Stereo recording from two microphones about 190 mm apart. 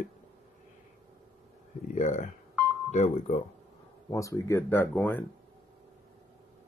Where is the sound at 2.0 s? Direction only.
40° left (ahead or behind).